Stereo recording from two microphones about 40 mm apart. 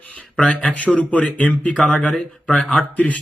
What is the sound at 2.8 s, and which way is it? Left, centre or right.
Speech, left.